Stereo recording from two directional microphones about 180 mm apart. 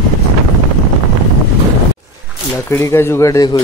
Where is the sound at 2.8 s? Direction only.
15° left (ahead or behind).